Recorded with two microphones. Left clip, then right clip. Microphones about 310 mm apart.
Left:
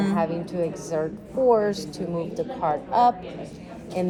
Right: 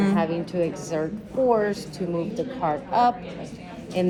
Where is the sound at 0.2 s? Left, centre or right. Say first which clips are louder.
Right 1 dB; left.